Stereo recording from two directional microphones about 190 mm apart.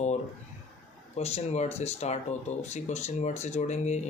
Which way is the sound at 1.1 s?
35° left (ahead or behind).